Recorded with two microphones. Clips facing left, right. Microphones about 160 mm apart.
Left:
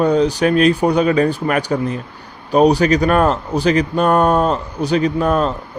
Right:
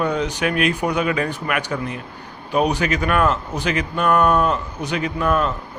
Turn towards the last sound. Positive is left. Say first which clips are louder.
# left 4 dB
turn(degrees=35)  # may be behind; listen again after turning